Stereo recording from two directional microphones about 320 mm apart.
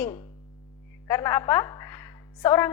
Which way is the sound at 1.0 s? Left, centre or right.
Centre.